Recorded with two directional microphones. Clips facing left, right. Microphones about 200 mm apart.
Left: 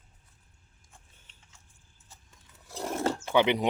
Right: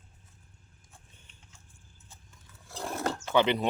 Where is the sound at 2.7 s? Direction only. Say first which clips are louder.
Left 3 dB; 20° left (ahead or behind).